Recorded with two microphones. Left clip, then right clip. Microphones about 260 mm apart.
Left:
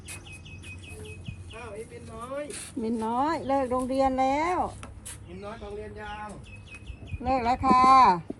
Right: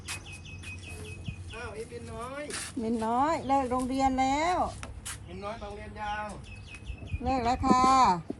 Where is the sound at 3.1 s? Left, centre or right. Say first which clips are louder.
Even; right.